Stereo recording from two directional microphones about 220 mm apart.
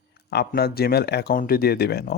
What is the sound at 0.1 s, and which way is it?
Speech, 50° left (ahead or behind).